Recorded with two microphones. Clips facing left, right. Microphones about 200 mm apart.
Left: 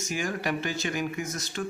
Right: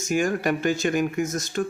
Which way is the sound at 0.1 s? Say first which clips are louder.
Right 8 dB; 50° right (ahead or behind).